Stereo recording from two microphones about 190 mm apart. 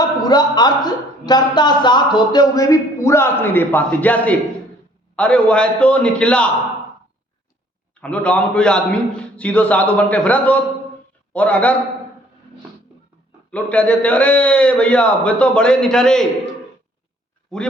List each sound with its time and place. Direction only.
0.0 s a man's voice: 20° left (ahead or behind)
8.0 s a man's voice: 5° left (ahead or behind)
13.5 s a man's voice: 5° left (ahead or behind)